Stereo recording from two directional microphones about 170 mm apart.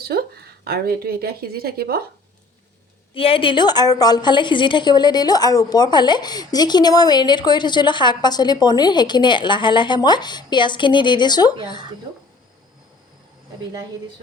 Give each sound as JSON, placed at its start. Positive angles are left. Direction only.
{"t": 0.0, "sound": "speech", "side_deg": -65}
{"t": 3.2, "sound": "a woman's voice", "side_deg": 30}